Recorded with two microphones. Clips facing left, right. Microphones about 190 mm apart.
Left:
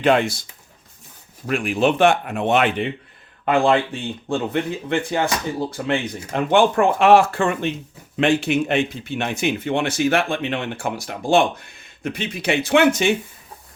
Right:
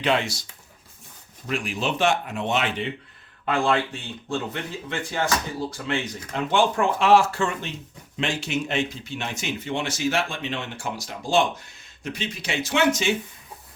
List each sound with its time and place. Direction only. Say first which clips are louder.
0.0 s speech: left 6 dB; 55° left (ahead or behind)
1.5 s speech: left 8 dB; 55° left (ahead or behind)